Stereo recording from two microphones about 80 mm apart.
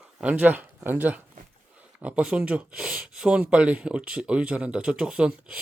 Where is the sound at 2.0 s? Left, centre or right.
Centre.